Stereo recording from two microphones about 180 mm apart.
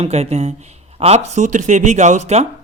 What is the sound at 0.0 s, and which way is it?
Speech, 35° right (ahead or behind).